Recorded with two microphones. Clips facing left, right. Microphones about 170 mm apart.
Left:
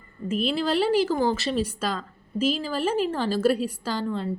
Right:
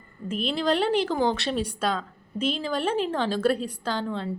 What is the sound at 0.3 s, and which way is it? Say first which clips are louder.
Speech: left 1 dB; 5° left (ahead or behind).